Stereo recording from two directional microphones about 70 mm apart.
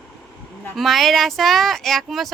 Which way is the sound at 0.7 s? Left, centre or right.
Centre.